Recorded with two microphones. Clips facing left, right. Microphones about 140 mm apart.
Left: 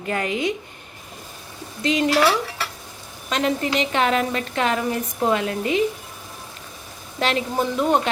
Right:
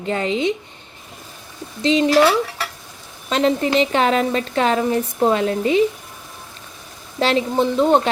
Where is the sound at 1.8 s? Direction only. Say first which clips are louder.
Right 4 dB; 25° right (ahead or behind).